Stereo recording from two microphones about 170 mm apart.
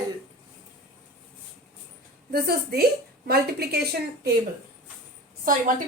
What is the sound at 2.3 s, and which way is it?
A woman's voice, 65° right (ahead or behind).